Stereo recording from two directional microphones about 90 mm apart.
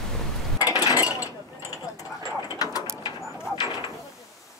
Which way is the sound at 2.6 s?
45° left (ahead or behind).